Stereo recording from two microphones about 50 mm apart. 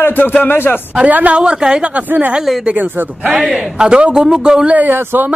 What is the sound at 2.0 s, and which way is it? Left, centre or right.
A man's voice, right.